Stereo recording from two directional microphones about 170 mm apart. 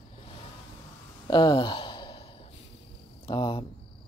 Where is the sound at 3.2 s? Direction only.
30° left (ahead or behind).